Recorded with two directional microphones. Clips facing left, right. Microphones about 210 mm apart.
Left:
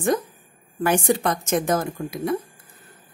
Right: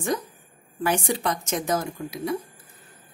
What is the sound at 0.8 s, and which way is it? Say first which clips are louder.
Speech: left 4 dB; 50° left (ahead or behind).